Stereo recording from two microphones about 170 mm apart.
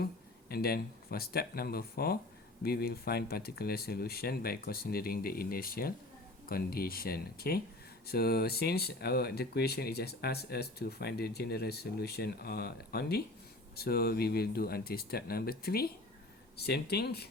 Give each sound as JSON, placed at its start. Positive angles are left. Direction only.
{"t": 0.0, "sound": "speech", "side_deg": 65}